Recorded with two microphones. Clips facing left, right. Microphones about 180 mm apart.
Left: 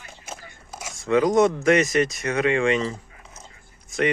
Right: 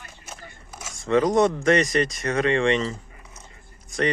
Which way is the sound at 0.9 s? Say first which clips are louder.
Left 1 dB; centre (ahead or behind).